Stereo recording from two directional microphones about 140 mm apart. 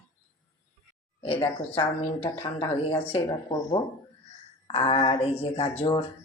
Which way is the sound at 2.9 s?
45° left (ahead or behind).